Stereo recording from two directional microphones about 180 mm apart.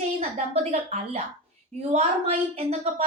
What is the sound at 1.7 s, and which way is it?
A woman's voice, 35° right (ahead or behind).